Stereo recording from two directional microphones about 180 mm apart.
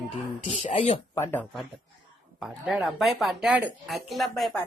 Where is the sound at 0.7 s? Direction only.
40° left (ahead or behind).